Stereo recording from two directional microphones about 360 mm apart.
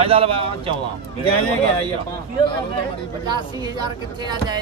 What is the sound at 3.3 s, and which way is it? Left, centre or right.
Speech, centre.